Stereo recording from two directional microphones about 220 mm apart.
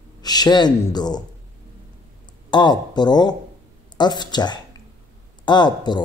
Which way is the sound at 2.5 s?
20° left (ahead or behind).